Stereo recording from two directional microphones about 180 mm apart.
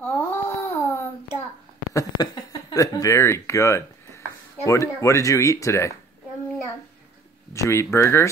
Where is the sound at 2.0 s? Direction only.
20° left (ahead or behind).